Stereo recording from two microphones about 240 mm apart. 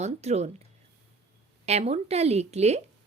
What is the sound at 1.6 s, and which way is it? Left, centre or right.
Speech, right.